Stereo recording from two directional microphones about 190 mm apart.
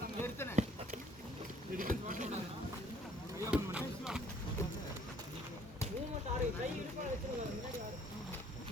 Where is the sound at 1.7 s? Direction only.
45° right (ahead or behind).